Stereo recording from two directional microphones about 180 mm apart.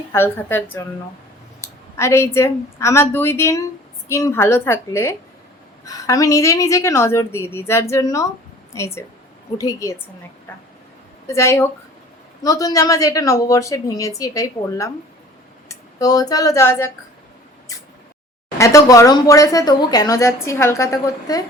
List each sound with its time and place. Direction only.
0.1 s speech: 15° left (ahead or behind)
2.0 s a woman's voice: 15° left (ahead or behind)
11.3 s a woman's voice: 15° left (ahead or behind)
18.5 s speech: 15° left (ahead or behind)